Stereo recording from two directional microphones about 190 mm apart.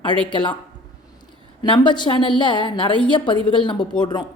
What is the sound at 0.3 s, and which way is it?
Speech, 25° left (ahead or behind).